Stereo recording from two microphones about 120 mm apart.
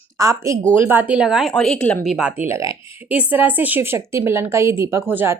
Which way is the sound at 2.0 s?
5° right (ahead or behind).